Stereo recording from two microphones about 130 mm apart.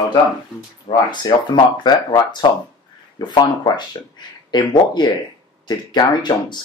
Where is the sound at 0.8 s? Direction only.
35° left (ahead or behind).